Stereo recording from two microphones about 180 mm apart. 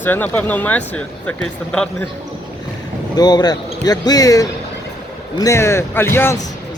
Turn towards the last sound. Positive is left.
turn(degrees=15)  # may be behind; listen again after turning